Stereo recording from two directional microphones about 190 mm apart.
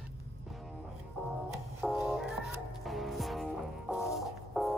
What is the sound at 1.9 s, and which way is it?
Music, 5° right (ahead or behind).